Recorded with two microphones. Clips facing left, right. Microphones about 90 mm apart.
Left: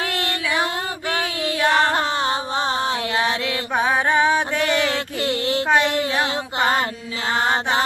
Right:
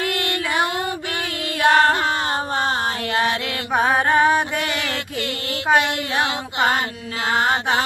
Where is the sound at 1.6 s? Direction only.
35° left (ahead or behind).